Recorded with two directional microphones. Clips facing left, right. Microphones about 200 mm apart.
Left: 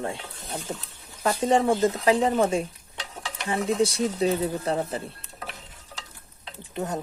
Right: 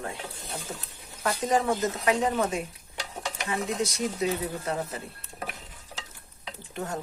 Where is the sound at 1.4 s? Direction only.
30° left (ahead or behind).